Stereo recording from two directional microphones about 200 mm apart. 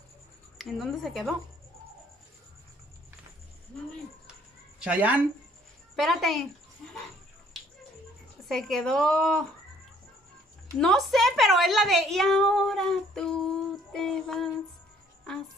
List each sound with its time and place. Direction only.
0.6 s a woman's voice: centre (ahead or behind)
4.7 s a woman's voice: 5° right (ahead or behind)
7.5 s a sound: centre (ahead or behind)
8.5 s a woman's voice: centre (ahead or behind)
10.8 s a woman's voice: centre (ahead or behind)